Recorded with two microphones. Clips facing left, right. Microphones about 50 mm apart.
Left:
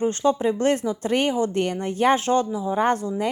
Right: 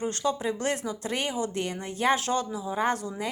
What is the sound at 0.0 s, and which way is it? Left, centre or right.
Speech, left.